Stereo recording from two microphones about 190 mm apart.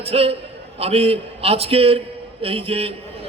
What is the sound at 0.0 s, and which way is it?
A man's voice, 30° right (ahead or behind).